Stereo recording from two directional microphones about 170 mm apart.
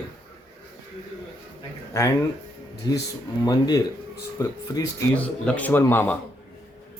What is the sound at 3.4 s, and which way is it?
Speech, 25° left (ahead or behind).